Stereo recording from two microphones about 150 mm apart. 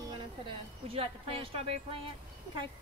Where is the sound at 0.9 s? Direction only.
40° right (ahead or behind).